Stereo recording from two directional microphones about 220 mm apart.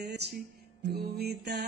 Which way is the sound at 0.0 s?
50° right (ahead or behind).